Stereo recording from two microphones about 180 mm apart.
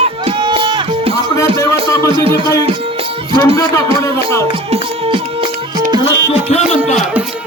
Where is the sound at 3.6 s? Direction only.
15° left (ahead or behind).